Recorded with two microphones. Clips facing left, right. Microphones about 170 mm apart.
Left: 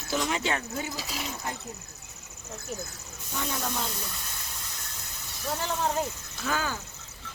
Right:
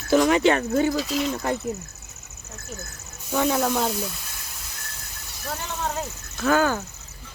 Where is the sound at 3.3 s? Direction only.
65° right (ahead or behind).